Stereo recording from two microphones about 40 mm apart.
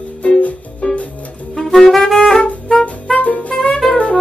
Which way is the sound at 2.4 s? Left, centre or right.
Left.